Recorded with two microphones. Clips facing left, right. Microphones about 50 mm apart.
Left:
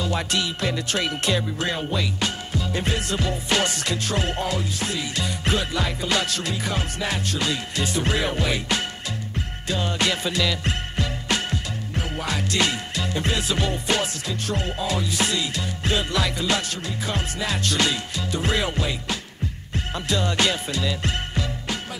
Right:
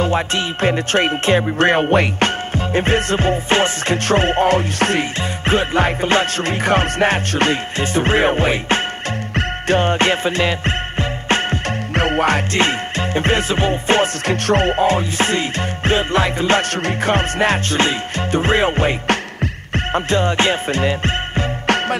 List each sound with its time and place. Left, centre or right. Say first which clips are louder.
0.0 s music: right 7 dB; right
5.4 s music: right 10 dB; right
11.9 s music: right 13 dB; right
12.5 s music: right 6 dB; right
14.2 s music: right 11 dB; right
16.8 s music: right 11 dB; right